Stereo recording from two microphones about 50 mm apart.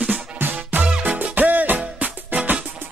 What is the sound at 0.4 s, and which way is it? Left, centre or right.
Music, right.